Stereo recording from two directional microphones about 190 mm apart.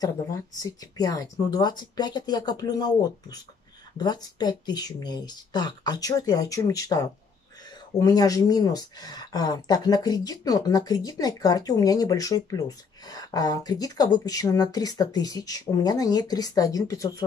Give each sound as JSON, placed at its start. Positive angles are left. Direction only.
{"t": 0.0, "sound": "speech", "side_deg": 20}